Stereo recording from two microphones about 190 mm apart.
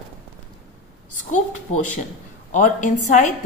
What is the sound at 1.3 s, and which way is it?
Speech, 40° left (ahead or behind).